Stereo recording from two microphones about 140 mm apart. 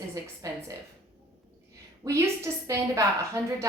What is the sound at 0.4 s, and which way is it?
Speech, 25° right (ahead or behind).